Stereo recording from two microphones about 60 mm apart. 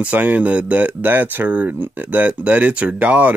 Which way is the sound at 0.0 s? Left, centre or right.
Right.